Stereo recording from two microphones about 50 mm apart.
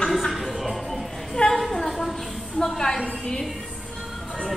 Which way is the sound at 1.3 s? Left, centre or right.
Centre.